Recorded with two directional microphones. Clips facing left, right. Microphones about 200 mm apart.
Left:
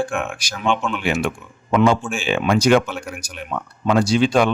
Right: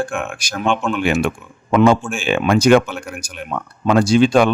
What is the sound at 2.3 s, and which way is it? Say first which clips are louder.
Speech: right 3 dB; 55° right (ahead or behind).